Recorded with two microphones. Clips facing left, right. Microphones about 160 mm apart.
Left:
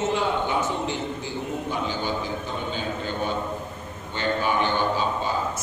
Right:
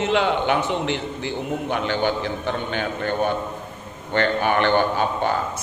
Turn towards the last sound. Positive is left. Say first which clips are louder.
# right 3 dB
turn(degrees=-60)  # may be behind; listen again after turning